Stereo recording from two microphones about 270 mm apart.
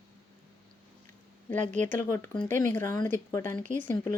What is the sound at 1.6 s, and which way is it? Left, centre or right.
Speech, right.